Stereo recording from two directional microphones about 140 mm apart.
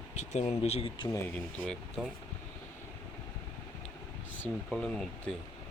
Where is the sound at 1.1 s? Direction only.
15° left (ahead or behind).